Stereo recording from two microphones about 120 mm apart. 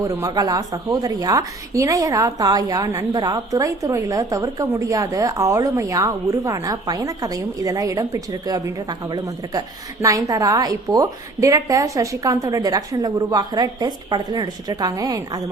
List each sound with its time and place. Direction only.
0.2 s a woman's voice: 30° right (ahead or behind)